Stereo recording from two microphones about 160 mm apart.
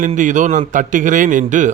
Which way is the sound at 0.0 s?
50° right (ahead or behind).